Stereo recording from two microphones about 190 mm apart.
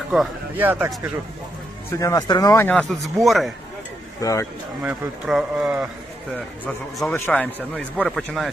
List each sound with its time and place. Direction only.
0.1 s speech: 5° right (ahead or behind)
1.9 s a man's voice: 15° left (ahead or behind)
3.2 s a man's voice: centre (ahead or behind)
4.2 s a man's voice: 15° left (ahead or behind)
4.8 s a man's voice: 5° right (ahead or behind)
6.7 s a man's voice: 10° left (ahead or behind)